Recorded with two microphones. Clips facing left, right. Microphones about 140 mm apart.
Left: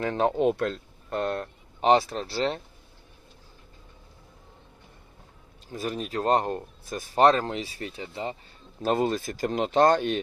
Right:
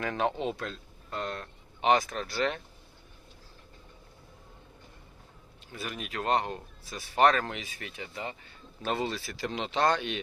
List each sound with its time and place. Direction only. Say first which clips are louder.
0.0 s speech: left 5 dB; 35° left (ahead or behind)
0.3 s speech: left 10 dB; 60° left (ahead or behind)
1.8 s speech: left 4 dB; 35° left (ahead or behind)
5.7 s speech: left 7 dB; 35° left (ahead or behind)
7.3 s speech: left 6 dB; 35° left (ahead or behind)
8.8 s speech: left 7 dB; 45° left (ahead or behind)